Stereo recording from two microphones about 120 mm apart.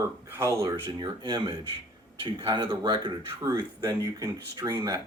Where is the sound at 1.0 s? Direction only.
40° right (ahead or behind).